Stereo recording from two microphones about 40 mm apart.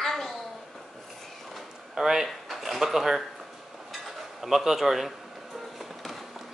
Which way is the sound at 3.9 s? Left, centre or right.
Centre.